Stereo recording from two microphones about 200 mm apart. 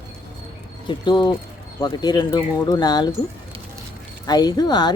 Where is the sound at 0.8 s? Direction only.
25° left (ahead or behind).